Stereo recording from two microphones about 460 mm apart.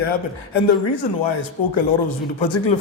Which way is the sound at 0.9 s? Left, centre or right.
Left.